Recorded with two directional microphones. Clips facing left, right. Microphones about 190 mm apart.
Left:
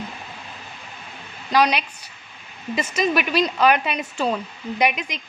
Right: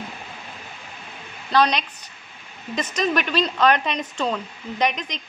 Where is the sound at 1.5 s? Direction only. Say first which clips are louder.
Even; 10° left (ahead or behind).